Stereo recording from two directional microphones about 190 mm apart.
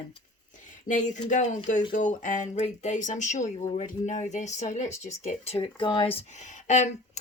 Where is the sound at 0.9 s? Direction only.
40° left (ahead or behind).